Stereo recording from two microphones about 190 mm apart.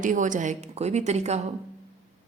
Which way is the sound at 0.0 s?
40° right (ahead or behind).